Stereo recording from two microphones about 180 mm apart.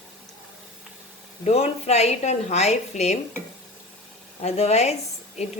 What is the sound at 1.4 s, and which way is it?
A woman's voice, 35° left (ahead or behind).